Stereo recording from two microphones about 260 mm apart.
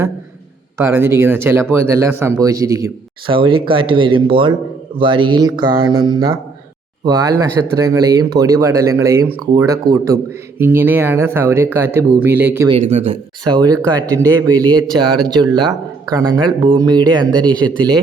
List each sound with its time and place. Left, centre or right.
0.8 s speech: centre
12.6 s speech: right